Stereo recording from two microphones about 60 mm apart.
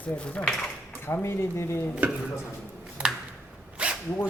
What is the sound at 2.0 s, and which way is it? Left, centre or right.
Speech, right.